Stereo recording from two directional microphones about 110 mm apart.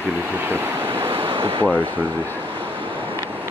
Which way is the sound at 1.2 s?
55° right (ahead or behind).